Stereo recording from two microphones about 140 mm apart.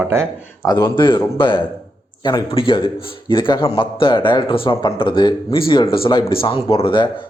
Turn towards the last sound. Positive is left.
turn(degrees=40)  # may be behind; listen again after turning